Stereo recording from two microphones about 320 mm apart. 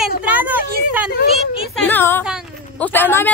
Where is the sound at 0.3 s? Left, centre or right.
Centre.